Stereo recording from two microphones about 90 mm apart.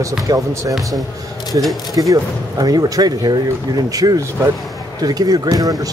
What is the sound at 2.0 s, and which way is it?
Speech, 45° right (ahead or behind).